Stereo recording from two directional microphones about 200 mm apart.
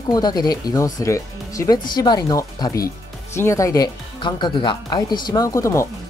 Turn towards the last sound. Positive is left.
turn(degrees=15)  # may be behind; listen again after turning